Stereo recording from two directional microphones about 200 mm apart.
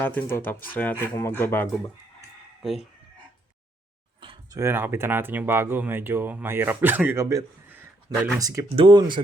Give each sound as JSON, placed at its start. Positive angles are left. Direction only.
{"t": 0.0, "sound": "speech", "side_deg": 10}
{"t": 2.6, "sound": "speech", "side_deg": 0}
{"t": 4.2, "sound": "a sound", "side_deg": -25}
{"t": 4.6, "sound": "speech", "side_deg": -10}